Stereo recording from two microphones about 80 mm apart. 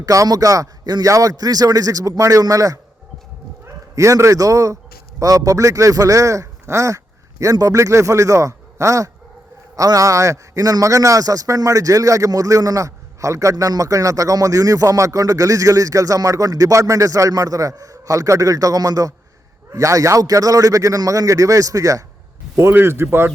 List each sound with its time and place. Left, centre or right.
0.0 s a man's voice: right
3.9 s a man's voice: right
22.5 s a man's voice: right